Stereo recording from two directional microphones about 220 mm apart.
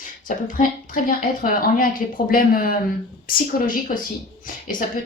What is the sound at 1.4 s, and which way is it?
Speech, 40° left (ahead or behind).